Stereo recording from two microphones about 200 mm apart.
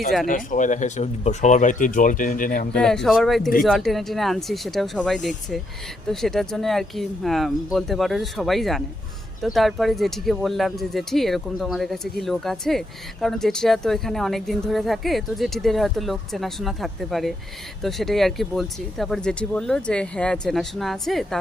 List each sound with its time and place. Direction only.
0.3 s speech: 40° left (ahead or behind)
2.7 s speech: 5° left (ahead or behind)